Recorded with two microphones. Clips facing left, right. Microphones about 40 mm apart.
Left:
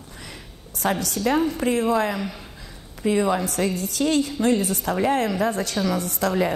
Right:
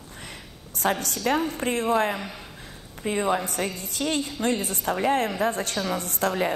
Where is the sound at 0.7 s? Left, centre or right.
Right.